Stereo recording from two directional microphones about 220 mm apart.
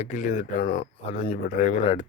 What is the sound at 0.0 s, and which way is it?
Speech, 35° left (ahead or behind).